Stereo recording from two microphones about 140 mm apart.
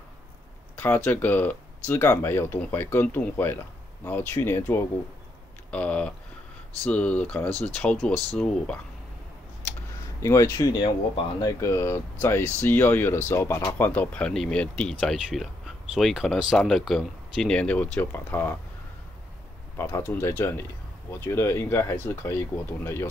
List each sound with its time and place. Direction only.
0.7 s speech: 15° left (ahead or behind)
10.2 s speech: 20° left (ahead or behind)
19.8 s speech: 20° left (ahead or behind)